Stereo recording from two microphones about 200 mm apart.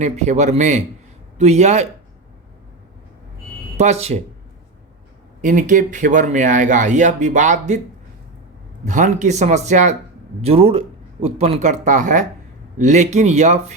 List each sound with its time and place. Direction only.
0.0 s speech: 35° right (ahead or behind)
3.8 s speech: 35° right (ahead or behind)
5.4 s speech: 40° right (ahead or behind)
8.8 s speech: 35° right (ahead or behind)